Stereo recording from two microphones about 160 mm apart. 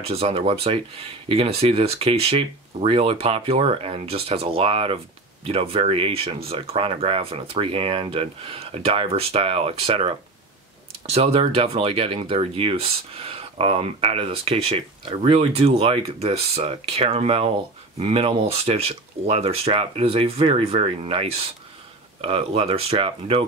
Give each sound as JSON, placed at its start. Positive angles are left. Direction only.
{"t": 0.0, "sound": "speech", "side_deg": -40}